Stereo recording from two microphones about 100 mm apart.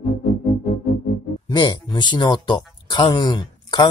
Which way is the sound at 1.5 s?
45° left (ahead or behind).